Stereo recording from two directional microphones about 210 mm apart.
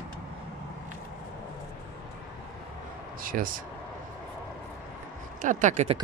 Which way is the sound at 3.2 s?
40° right (ahead or behind).